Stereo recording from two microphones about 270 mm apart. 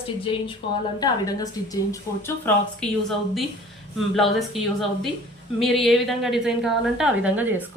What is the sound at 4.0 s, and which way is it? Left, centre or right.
A woman's voice, centre.